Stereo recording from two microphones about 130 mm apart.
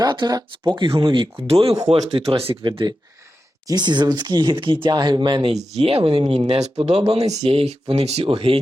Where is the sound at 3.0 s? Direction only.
25° right (ahead or behind); by 5.5 s 40° right (ahead or behind).